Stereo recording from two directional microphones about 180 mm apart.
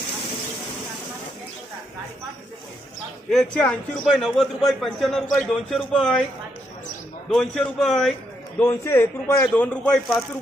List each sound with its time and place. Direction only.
3.3 s a man's voice: 5° left (ahead or behind)
7.3 s a man's voice: 5° left (ahead or behind)
8.5 s speech: 15° left (ahead or behind)